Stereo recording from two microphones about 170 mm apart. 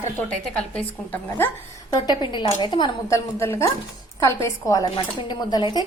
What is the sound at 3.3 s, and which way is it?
A woman's voice, 15° left (ahead or behind).